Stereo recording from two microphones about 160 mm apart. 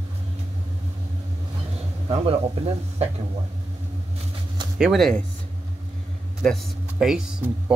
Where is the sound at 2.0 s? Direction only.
40° right (ahead or behind).